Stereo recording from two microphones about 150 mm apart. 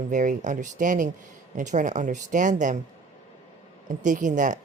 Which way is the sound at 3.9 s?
60° right (ahead or behind).